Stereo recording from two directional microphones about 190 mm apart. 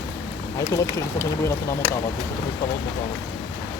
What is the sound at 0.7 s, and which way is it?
Speech, 15° left (ahead or behind).